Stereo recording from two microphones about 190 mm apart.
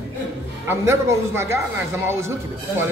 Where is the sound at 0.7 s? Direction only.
15° right (ahead or behind).